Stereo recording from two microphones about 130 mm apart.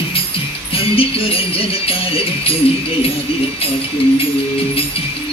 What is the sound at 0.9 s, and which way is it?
Music, 45° left (ahead or behind).